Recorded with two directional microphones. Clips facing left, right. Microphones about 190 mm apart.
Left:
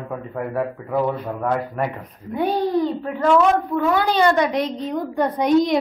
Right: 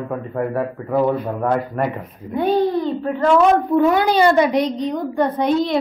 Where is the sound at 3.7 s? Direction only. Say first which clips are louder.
Right 4 dB; 15° right (ahead or behind).